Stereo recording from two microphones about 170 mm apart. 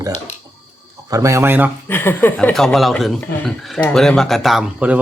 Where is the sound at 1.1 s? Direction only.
20° right (ahead or behind).